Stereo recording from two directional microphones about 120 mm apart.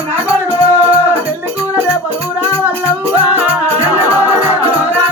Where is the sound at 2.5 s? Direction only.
15° right (ahead or behind).